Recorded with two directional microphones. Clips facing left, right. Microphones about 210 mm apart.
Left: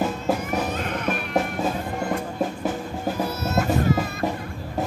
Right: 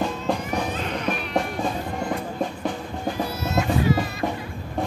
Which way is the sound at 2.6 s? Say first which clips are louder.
Left 1 dB; 5° left (ahead or behind).